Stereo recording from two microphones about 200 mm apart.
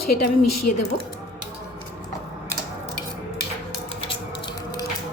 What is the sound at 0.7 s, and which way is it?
Speech, 40° left (ahead or behind).